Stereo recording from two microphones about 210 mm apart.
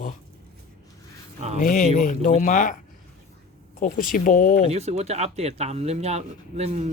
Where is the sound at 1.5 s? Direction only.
40° left (ahead or behind).